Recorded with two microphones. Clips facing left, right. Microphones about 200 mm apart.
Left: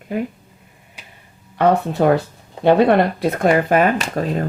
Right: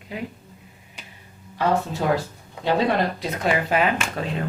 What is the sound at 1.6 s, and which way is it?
Speech, 60° left (ahead or behind).